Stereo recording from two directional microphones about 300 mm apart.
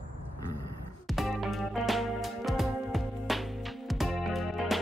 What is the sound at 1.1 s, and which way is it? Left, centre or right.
Music, centre.